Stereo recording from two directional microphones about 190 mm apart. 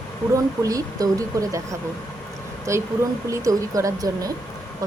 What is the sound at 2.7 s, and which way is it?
A woman's voice, 15° right (ahead or behind).